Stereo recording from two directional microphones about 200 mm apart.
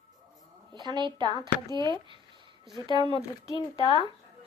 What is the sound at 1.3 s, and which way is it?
Speech, 20° left (ahead or behind).